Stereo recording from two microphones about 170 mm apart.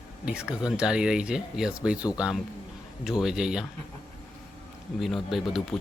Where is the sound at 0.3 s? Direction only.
5° right (ahead or behind).